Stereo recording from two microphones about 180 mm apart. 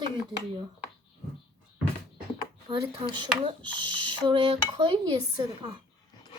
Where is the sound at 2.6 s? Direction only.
30° right (ahead or behind).